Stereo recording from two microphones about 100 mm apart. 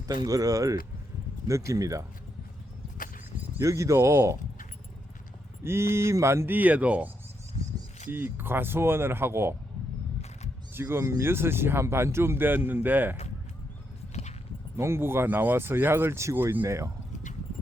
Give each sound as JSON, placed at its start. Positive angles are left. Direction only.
{"t": 0.1, "sound": "speech", "side_deg": -35}
{"t": 3.6, "sound": "speech", "side_deg": -30}
{"t": 5.6, "sound": "speech", "side_deg": -25}
{"t": 8.1, "sound": "speech", "side_deg": -20}
{"t": 10.8, "sound": "speech", "side_deg": -25}
{"t": 14.8, "sound": "speech", "side_deg": -25}